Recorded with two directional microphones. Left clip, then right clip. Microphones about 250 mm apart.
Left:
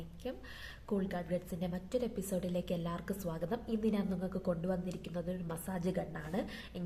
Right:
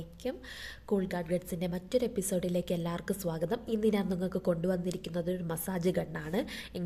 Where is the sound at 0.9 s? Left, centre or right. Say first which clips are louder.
Right 5 dB; right.